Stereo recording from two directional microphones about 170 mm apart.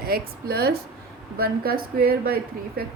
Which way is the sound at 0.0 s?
65° right (ahead or behind).